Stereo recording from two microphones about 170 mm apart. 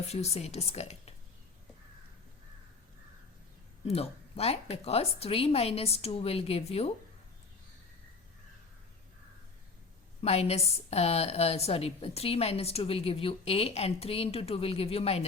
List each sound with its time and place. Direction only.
0.1 s a woman's voice: 40° left (ahead or behind)
3.8 s a woman's voice: 35° left (ahead or behind)
10.2 s a woman's voice: 40° left (ahead or behind)